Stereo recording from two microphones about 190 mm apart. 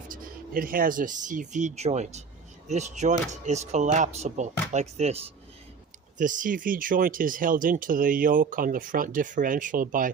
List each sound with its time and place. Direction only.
0.1 s speech: 50° right (ahead or behind)